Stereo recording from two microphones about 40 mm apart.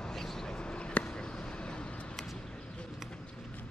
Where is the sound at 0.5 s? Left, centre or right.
Left.